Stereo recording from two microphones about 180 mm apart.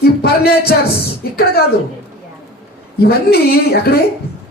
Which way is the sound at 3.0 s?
60° left (ahead or behind).